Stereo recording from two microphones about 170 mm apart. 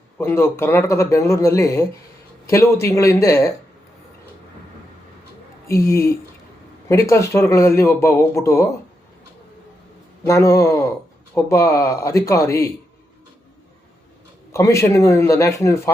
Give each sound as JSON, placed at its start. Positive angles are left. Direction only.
{"t": 0.2, "sound": "speech", "side_deg": 15}
{"t": 5.6, "sound": "speech", "side_deg": 15}
{"t": 10.2, "sound": "a man's voice", "side_deg": 20}
{"t": 14.5, "sound": "speech", "side_deg": 15}